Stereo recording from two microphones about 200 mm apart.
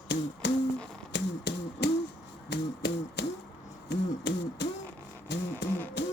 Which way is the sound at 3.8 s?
60° left (ahead or behind).